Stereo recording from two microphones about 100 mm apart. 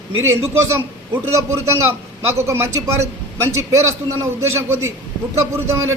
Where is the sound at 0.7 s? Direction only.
25° right (ahead or behind).